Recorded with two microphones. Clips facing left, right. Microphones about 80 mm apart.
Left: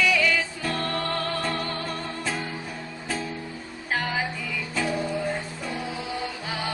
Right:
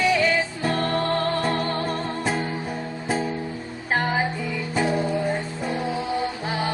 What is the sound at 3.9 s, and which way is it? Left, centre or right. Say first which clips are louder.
Music: right 5 dB; right.